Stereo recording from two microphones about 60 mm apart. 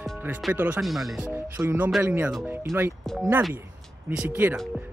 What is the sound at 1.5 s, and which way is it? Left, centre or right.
Speech, right.